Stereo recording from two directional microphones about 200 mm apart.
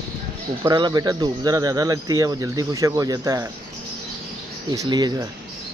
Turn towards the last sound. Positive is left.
turn(degrees=-20)  # may be behind; listen again after turning